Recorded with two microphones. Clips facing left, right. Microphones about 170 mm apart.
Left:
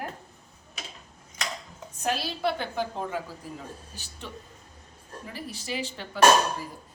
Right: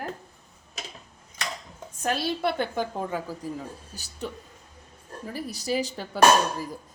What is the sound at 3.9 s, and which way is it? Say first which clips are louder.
Speech: right 7 dB; 40° right (ahead or behind).